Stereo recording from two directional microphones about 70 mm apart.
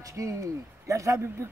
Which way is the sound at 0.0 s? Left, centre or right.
Right.